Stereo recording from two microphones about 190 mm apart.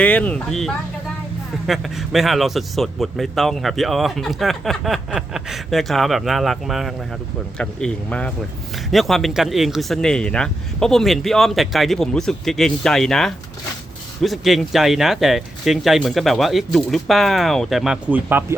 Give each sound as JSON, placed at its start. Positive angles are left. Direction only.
{"t": 0.0, "sound": "speech", "side_deg": 5}